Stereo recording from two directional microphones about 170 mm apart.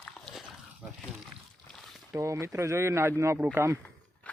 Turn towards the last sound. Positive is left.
turn(degrees=-15)  # may be behind; listen again after turning